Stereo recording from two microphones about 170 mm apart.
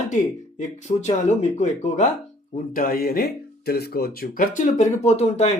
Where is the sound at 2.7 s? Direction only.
55° left (ahead or behind); by 5.5 s 40° left (ahead or behind).